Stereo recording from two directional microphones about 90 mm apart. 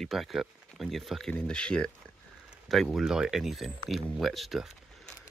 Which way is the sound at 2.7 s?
Centre (ahead or behind).